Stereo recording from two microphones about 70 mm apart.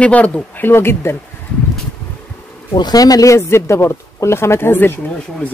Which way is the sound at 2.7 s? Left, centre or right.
Left.